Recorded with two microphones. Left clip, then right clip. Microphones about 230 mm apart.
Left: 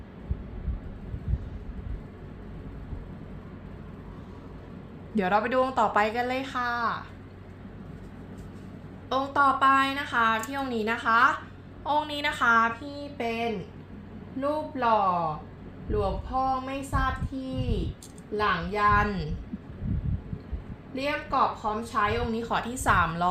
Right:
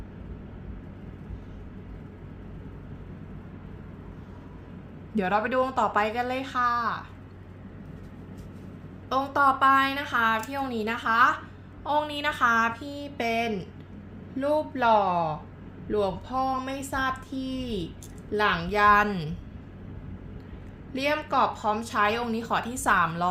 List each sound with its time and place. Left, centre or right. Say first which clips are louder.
5.1 s a woman's voice: left 1 dB; centre
9.0 s a woman's voice: right 1 dB; centre
13.0 s a woman's voice: right 4 dB; centre
20.9 s a woman's voice: right 2 dB; centre